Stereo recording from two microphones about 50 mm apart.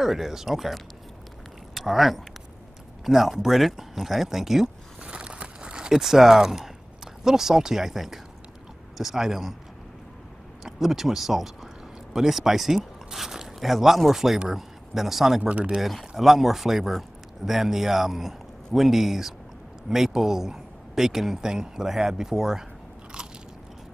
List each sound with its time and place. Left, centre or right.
0.0 s speech: centre
5.0 s a sound: centre
7.2 s speech: centre
10.6 s speech: centre
15.4 s speech: right
15.8 s speech: centre